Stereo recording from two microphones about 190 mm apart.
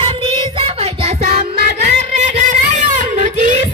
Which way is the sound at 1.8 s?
40° right (ahead or behind).